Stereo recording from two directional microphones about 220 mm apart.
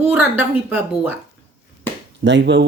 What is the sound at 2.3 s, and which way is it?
Speech, 55° right (ahead or behind).